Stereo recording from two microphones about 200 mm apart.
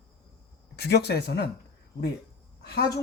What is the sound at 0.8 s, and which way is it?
Speech, 55° left (ahead or behind).